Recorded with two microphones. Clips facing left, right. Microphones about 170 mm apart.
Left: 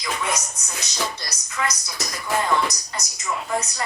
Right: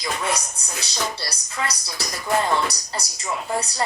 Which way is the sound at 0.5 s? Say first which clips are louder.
Right 1 dB; 30° right (ahead or behind).